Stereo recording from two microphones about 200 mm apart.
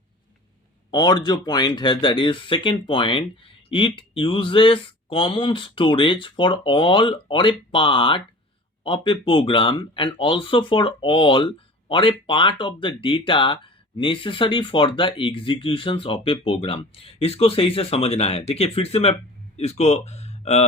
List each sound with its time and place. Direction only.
0.9 s speech: 20° left (ahead or behind)